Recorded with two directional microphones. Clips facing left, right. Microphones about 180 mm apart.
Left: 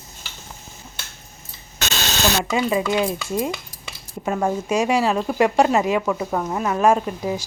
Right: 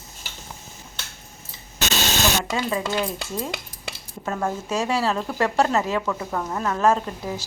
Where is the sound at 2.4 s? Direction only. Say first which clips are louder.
Left 4 dB; 15° left (ahead or behind).